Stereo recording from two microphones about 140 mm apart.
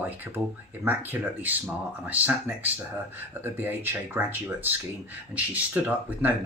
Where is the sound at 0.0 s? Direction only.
15° right (ahead or behind).